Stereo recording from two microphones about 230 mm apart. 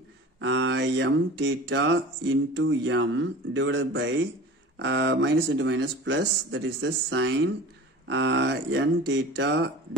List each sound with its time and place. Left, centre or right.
0.4 s speech: right